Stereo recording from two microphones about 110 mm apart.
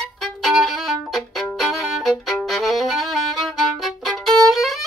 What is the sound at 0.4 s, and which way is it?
Violin, centre (ahead or behind).